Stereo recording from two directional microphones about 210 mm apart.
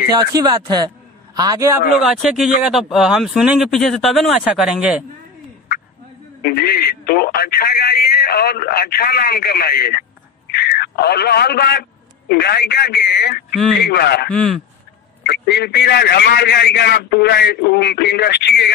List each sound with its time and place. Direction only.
0.2 s a man's voice: 20° right (ahead or behind)
2.0 s speech: centre (ahead or behind)
6.4 s a man's voice: 45° left (ahead or behind)
14.3 s speech: 5° left (ahead or behind)
15.2 s speech: 50° left (ahead or behind)